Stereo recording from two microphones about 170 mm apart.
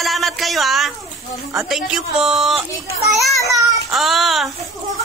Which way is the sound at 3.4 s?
20° right (ahead or behind).